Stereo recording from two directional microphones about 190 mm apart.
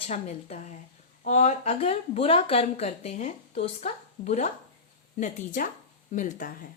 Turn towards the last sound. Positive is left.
turn(degrees=45)  # may be behind; listen again after turning